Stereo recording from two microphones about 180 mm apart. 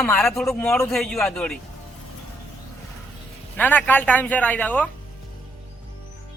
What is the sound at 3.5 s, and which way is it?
Speech, 10° left (ahead or behind).